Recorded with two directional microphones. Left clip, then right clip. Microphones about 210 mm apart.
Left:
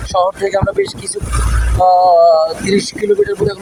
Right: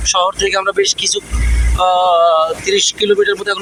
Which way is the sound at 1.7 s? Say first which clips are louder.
Left 3 dB; 10° right (ahead or behind).